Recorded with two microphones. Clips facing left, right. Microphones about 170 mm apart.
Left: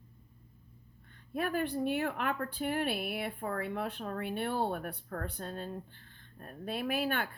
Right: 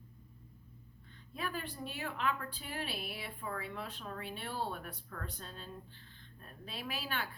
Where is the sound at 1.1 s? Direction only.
60° left (ahead or behind).